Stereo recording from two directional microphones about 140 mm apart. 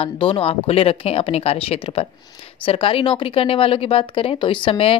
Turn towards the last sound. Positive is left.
turn(degrees=40)  # may be behind; listen again after turning